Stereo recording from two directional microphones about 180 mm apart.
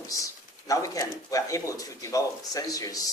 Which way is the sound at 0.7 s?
20° left (ahead or behind).